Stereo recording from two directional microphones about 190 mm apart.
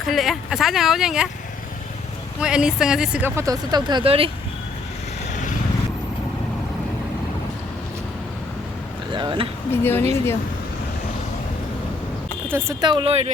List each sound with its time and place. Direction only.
0.0 s speech: centre (ahead or behind)
2.4 s speech: 5° right (ahead or behind); by 4.3 s 30° right (ahead or behind)
9.1 s speech: 25° right (ahead or behind)
9.7 s speech: 10° left (ahead or behind)
12.5 s speech: 15° right (ahead or behind); by 13.3 s 30° right (ahead or behind)